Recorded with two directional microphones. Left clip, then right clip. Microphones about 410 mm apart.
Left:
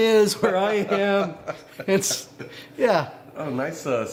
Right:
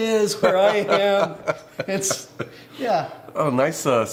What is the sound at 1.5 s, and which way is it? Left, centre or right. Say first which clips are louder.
Speech: right 8 dB; right.